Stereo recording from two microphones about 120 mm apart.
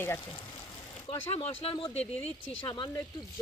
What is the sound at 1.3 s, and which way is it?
Speech, 50° left (ahead or behind).